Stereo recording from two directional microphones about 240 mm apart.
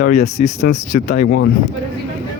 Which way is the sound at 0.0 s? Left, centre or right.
Left.